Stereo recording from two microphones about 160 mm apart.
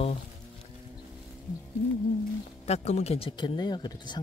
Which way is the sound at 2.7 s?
45° left (ahead or behind).